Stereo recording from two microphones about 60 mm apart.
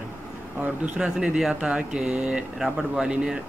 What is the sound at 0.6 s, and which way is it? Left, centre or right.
Speech, right.